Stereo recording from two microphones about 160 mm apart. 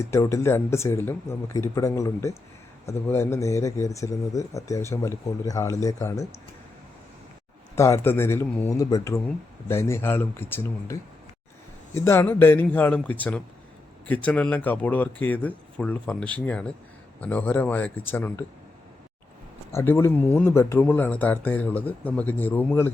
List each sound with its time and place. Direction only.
0.0 s a man's voice: 20° left (ahead or behind)
7.8 s a man's voice: 20° left (ahead or behind)
11.9 s a man's voice: 15° left (ahead or behind)
19.7 s a man's voice: 15° left (ahead or behind)